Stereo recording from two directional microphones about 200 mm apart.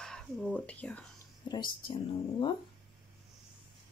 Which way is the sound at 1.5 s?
25° left (ahead or behind).